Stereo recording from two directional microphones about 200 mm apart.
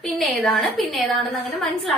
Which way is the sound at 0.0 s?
Centre (ahead or behind).